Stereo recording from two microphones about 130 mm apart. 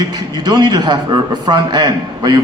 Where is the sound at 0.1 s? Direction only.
30° right (ahead or behind).